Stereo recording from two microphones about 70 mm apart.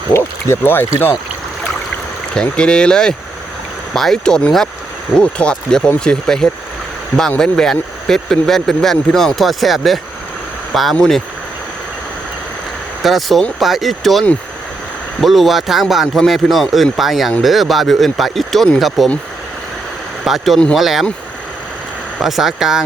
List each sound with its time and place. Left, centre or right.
0.1 s speech: left
2.3 s speech: centre
13.0 s speech: centre
20.2 s speech: centre
22.2 s speech: centre